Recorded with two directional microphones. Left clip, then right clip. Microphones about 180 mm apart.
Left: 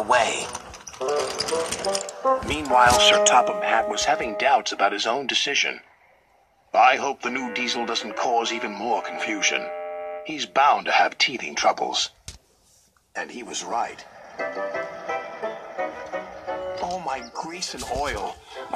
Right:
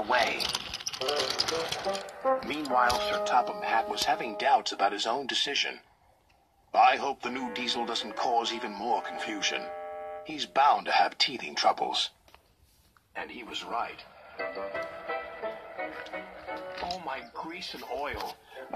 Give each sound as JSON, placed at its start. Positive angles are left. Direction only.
{"t": 0.0, "sound": "speech", "side_deg": 30}
{"t": 13.1, "sound": "music", "side_deg": 65}